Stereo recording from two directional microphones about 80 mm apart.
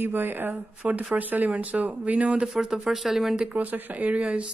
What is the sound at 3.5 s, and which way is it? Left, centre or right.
Speech, right.